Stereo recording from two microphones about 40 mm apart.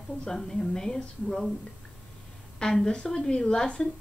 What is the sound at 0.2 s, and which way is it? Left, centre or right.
Speech, centre.